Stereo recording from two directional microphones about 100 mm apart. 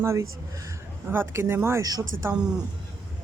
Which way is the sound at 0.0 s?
30° right (ahead or behind).